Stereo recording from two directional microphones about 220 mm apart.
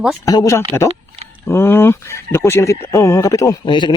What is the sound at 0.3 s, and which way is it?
Speech, 15° left (ahead or behind).